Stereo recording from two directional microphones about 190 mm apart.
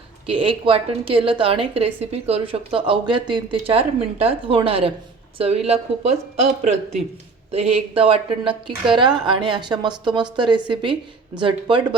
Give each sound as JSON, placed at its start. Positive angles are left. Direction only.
{"t": 0.3, "sound": "a woman's voice", "side_deg": -30}